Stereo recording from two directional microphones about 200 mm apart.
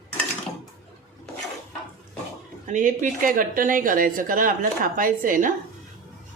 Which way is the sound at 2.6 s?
40° right (ahead or behind).